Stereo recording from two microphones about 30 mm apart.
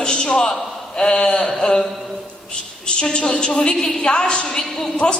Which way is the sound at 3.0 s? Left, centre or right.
Left.